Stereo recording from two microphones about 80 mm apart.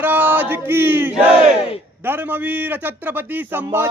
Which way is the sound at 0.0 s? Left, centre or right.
Right.